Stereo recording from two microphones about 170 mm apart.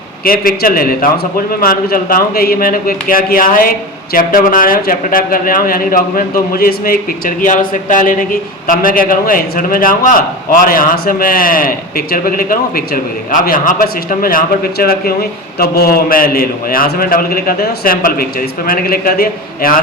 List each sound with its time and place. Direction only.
0.3 s a man's voice: 60° left (ahead or behind)